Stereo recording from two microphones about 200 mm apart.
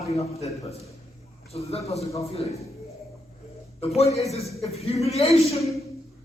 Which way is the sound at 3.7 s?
30° left (ahead or behind).